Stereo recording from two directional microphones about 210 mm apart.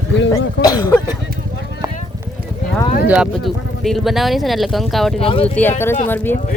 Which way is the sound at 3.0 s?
5° right (ahead or behind).